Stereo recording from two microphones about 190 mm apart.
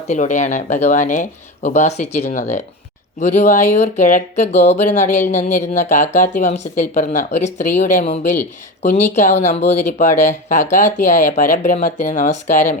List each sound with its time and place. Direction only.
0.1 s speech: 40° left (ahead or behind)